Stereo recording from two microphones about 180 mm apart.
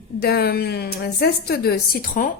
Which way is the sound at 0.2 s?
60° left (ahead or behind).